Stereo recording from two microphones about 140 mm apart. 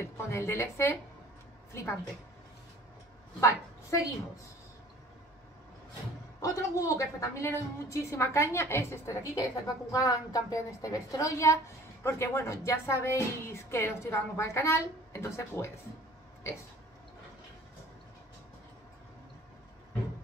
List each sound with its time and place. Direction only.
0.0 s a woman's voice: 20° left (ahead or behind)
3.3 s a woman's voice: 20° left (ahead or behind)
6.4 s speech: 20° left (ahead or behind)